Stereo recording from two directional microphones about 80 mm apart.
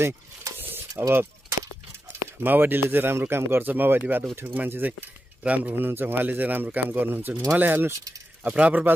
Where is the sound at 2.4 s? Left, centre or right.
Right.